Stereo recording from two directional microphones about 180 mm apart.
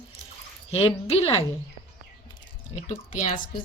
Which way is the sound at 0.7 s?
35° left (ahead or behind).